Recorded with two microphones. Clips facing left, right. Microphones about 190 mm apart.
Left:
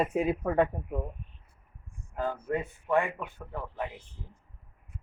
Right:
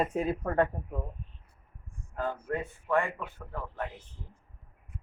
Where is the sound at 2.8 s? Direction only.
15° left (ahead or behind).